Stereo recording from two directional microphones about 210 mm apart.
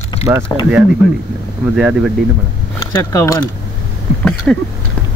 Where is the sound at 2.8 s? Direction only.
15° left (ahead or behind).